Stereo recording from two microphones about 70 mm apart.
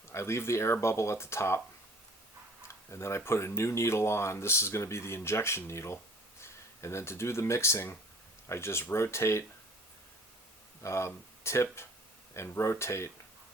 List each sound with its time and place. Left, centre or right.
0.1 s speech: left
2.9 s speech: left
10.8 s speech: left